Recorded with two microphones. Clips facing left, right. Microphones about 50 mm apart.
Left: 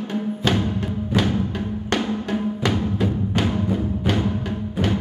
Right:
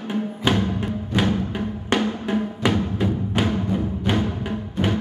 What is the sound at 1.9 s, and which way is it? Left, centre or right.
Drum, centre.